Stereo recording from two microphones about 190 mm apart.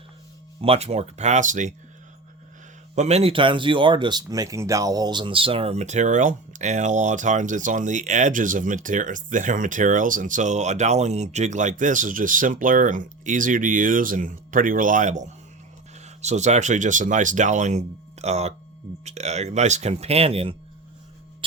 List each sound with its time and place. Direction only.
0.6 s speech: 30° right (ahead or behind)
2.9 s speech: 35° right (ahead or behind)